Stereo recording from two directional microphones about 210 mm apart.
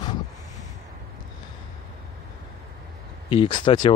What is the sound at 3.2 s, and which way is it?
Speech, 20° left (ahead or behind).